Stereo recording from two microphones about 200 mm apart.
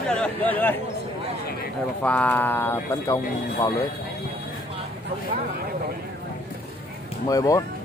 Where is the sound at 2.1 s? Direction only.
10° left (ahead or behind).